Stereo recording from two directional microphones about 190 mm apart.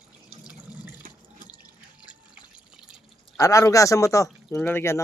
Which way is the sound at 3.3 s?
15° left (ahead or behind).